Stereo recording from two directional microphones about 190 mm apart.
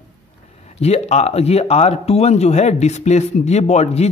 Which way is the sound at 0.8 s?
35° left (ahead or behind).